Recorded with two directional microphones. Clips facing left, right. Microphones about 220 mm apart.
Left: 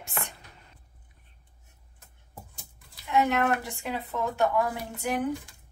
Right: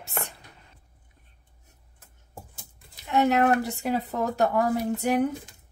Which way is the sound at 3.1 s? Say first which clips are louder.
Right 4 dB; 40° right (ahead or behind).